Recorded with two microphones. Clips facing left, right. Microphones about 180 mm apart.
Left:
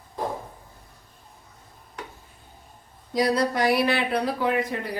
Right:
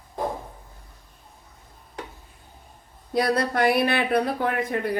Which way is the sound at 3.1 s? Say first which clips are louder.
Even; 60° right (ahead or behind).